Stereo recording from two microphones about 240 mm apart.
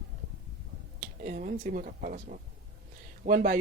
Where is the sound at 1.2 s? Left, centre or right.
Right.